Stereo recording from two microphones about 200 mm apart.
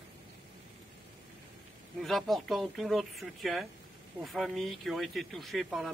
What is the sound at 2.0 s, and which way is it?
Speech, centre (ahead or behind).